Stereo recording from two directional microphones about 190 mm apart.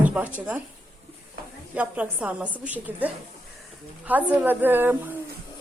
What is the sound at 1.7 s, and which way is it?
A woman's voice, 10° right (ahead or behind).